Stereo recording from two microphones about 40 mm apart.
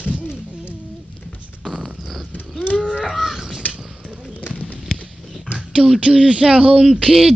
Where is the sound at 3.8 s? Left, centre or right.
Centre.